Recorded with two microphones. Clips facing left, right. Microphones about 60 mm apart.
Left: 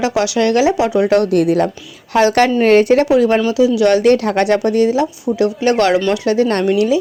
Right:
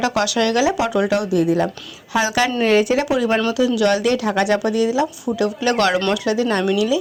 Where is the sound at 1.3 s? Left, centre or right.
Left.